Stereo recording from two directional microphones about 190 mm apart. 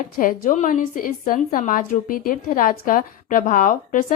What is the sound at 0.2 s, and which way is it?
A woman's voice, 45° left (ahead or behind).